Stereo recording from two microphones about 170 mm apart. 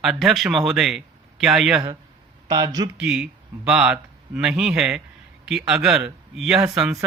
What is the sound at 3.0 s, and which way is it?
A man's voice, 5° right (ahead or behind).